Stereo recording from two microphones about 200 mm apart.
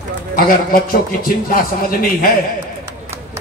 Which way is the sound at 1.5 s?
45° left (ahead or behind).